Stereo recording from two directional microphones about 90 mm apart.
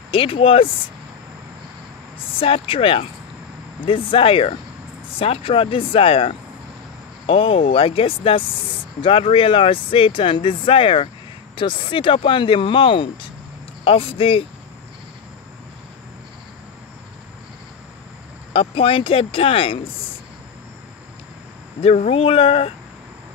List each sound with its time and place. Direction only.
0.1 s speech: 90° left
2.1 s speech: 85° left
3.8 s speech: 80° left
13.8 s speech: 85° left
18.5 s speech: 90° left
21.8 s speech: 90° left